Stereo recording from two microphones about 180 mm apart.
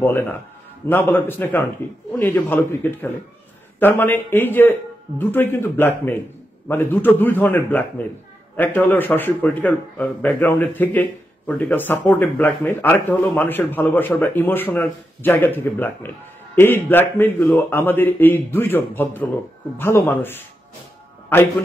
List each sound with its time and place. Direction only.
0.0 s a man's voice: 10° left (ahead or behind)